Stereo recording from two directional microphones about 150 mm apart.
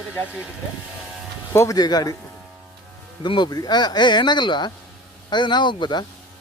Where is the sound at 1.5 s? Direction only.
25° left (ahead or behind).